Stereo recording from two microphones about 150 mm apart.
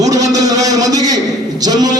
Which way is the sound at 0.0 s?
25° right (ahead or behind).